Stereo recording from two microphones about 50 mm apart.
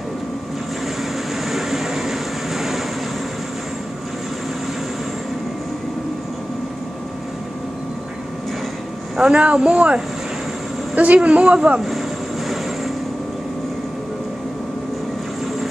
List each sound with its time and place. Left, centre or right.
1.3 s vehicle: centre
9.1 s speech: centre